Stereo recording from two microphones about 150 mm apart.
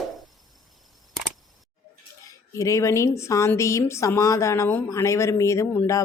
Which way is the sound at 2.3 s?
20° left (ahead or behind).